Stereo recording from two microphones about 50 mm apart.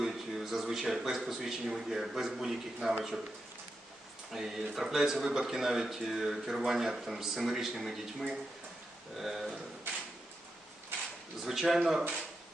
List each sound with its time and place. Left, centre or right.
0.0 s a sound: centre
1.2 s a man's voice: centre
4.4 s a man's voice: centre
9.1 s a man's voice: centre
10.9 s a sound: right
11.4 s a man's voice: centre